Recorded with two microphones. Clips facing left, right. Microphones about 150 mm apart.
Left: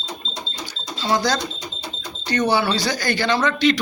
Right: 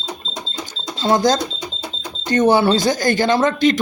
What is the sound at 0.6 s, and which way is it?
Cash register, 50° right (ahead or behind).